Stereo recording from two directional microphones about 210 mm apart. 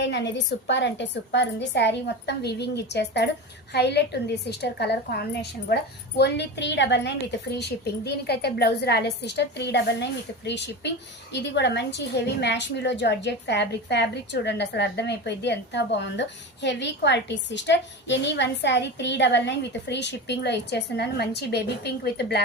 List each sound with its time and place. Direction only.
0.0 s a woman's voice: 55° left (ahead or behind)